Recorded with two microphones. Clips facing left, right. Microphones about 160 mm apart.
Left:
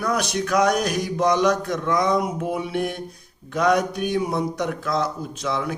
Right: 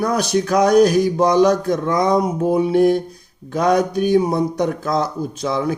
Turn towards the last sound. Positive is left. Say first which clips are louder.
# right 5 dB
turn(degrees=-40)  # may be behind; listen again after turning